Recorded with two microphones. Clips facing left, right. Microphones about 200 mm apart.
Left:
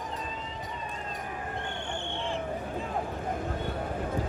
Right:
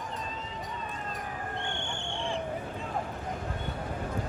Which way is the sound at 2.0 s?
Centre (ahead or behind).